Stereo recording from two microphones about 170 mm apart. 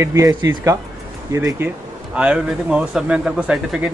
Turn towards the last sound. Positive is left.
turn(degrees=-5)  # may be behind; listen again after turning